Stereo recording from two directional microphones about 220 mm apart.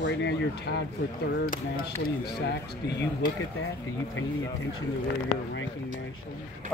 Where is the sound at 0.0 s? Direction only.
50° left (ahead or behind).